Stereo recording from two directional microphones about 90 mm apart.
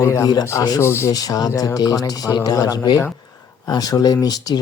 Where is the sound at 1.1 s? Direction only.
45° left (ahead or behind).